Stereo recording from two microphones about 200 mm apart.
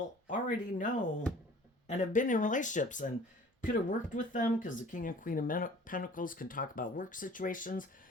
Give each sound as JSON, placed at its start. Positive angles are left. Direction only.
{"t": 0.3, "sound": "speech", "side_deg": 40}